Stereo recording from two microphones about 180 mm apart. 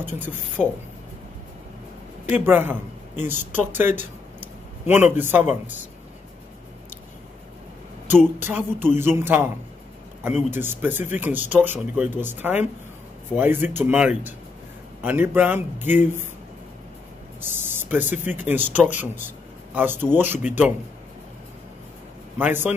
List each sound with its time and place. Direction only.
0.6 s speech: centre (ahead or behind)
2.4 s speech: 10° right (ahead or behind)
4.8 s speech: 10° right (ahead or behind)
8.4 s speech: 10° right (ahead or behind)
17.4 s a sound: 10° right (ahead or behind)
18.0 s speech: 40° left (ahead or behind)
18.3 s speech: 10° right (ahead or behind)
22.4 s speech: 10° right (ahead or behind)